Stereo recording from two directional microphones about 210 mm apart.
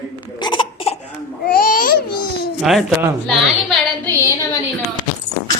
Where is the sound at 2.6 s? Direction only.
Centre (ahead or behind).